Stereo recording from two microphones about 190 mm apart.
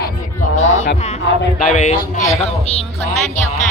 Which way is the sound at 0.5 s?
35° left (ahead or behind).